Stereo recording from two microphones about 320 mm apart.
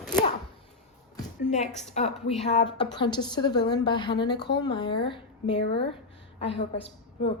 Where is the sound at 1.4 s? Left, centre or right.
Left.